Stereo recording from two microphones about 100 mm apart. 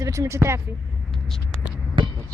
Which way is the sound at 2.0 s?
55° right (ahead or behind).